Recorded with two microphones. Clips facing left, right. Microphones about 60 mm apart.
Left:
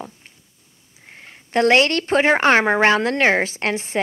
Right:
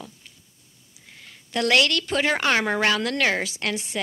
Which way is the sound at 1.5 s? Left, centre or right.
Left.